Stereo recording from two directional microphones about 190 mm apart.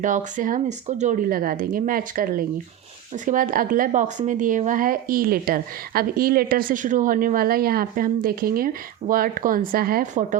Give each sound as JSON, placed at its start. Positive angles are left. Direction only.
{"t": 0.0, "sound": "speech", "side_deg": -40}